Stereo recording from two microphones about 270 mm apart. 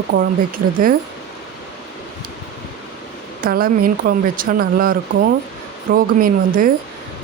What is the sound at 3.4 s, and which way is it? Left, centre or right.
Speech, right.